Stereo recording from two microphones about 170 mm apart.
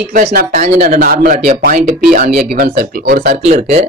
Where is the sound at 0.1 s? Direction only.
55° right (ahead or behind).